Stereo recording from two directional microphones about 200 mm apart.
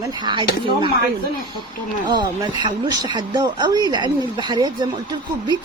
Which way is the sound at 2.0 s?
20° right (ahead or behind).